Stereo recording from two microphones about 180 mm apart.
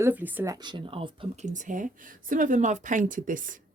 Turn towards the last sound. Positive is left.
turn(degrees=-50)  # may be behind; listen again after turning